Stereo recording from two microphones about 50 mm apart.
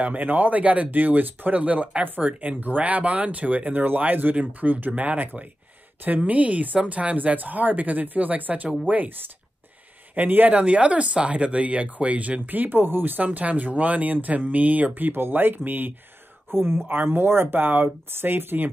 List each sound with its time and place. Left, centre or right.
0.0 s speech: right
15.0 s speech: right